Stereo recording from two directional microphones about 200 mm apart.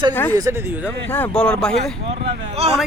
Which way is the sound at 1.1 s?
5° left (ahead or behind).